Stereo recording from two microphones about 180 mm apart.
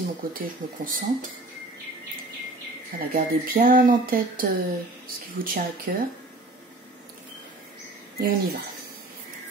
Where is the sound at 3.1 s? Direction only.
50° right (ahead or behind).